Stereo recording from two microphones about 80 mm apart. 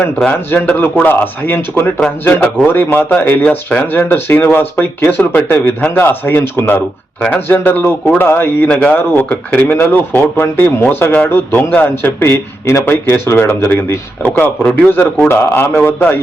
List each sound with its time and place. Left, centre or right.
0.3 s speech: centre
8.6 s a man's voice: centre
14.3 s a man's voice: centre
15.3 s speech: left